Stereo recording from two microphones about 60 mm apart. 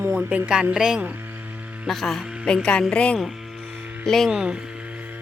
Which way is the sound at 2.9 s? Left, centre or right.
Centre.